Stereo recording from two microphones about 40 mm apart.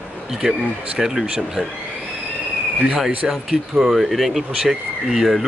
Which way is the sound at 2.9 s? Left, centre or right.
Centre.